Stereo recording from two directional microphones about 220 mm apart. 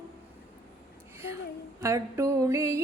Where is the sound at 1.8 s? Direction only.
15° right (ahead or behind).